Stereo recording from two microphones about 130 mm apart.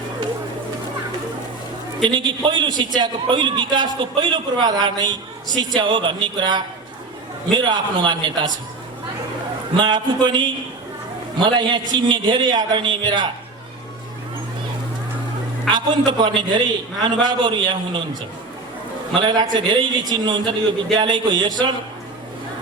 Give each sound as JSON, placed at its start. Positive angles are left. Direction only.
{"t": 2.0, "sound": "a man's voice", "side_deg": -35}
{"t": 9.7, "sound": "a man's voice", "side_deg": -35}
{"t": 15.7, "sound": "a man's voice", "side_deg": -35}
{"t": 19.2, "sound": "a man's voice", "side_deg": -35}